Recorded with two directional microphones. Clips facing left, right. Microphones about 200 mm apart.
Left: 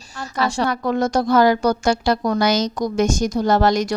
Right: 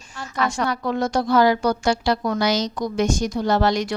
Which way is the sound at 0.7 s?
50° left (ahead or behind).